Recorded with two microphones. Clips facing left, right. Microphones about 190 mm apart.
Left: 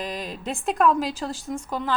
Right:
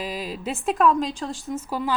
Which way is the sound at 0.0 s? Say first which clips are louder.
Right 1 dB; 5° right (ahead or behind).